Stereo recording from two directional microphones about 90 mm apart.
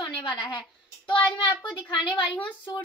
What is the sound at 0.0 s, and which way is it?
A child's voice, 65° left (ahead or behind).